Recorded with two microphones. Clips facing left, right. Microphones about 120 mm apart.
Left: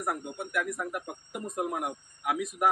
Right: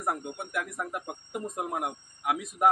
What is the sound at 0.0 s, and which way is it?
Speech, 25° right (ahead or behind).